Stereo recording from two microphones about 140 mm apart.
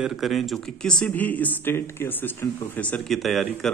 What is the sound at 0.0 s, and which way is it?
A man's voice, centre (ahead or behind).